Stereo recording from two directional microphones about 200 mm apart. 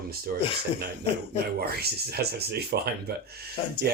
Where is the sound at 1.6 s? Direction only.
50° right (ahead or behind).